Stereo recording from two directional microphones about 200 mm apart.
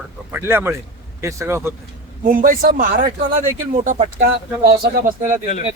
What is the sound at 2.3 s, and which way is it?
Speech, 45° right (ahead or behind).